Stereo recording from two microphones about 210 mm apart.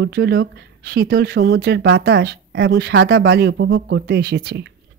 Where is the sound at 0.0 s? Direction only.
50° right (ahead or behind).